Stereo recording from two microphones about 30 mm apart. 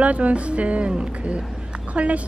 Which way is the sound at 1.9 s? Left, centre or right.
Right.